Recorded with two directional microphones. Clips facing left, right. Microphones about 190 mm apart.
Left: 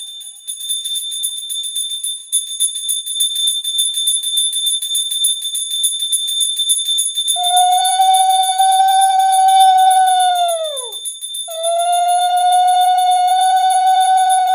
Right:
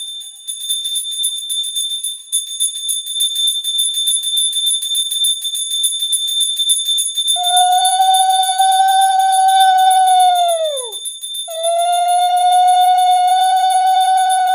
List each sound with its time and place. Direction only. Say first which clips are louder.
7.3 s a sound: even; 10° left (ahead or behind)
10.2 s howl: right 2 dB; 15° right (ahead or behind)
11.5 s music: even; 5° right (ahead or behind)